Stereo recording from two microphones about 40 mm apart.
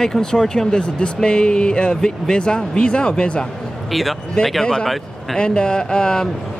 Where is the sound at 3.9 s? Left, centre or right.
Centre.